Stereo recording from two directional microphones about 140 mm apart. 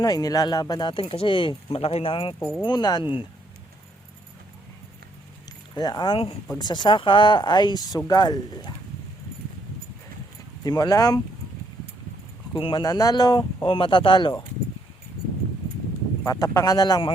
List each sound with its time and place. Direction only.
0.0 s speech: 25° left (ahead or behind)
2.6 s speech: 30° left (ahead or behind)
5.5 s keys jangling: 30° left (ahead or behind)
6.6 s speech: 30° left (ahead or behind)
10.6 s speech: 30° left (ahead or behind)
12.5 s speech: 40° left (ahead or behind)
12.8 s speech: 25° left (ahead or behind)
16.2 s speech: 25° left (ahead or behind)